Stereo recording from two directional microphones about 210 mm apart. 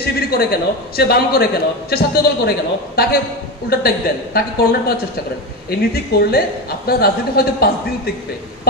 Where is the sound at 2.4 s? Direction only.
45° left (ahead or behind).